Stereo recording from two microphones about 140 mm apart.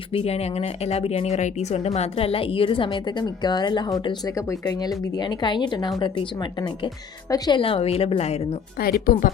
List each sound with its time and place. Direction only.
0.1 s speech: 45° left (ahead or behind)
8.8 s speech: 90° left